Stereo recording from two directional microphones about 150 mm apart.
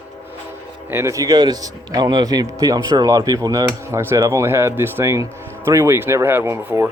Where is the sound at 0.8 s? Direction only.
20° right (ahead or behind).